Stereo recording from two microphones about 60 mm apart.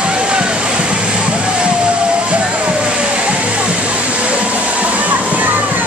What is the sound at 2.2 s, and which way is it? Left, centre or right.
Waterfall, centre.